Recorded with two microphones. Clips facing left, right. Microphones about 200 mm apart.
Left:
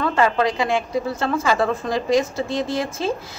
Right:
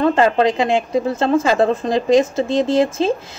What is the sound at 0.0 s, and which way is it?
Speech, 25° right (ahead or behind).